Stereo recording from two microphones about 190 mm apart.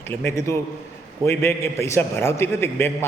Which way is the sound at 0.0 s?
10° left (ahead or behind).